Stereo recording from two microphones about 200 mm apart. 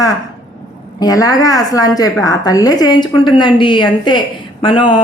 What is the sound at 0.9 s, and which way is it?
A woman's voice, 20° left (ahead or behind).